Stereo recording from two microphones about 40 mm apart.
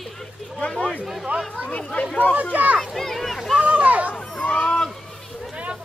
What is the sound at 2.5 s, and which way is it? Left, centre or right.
Speech, right.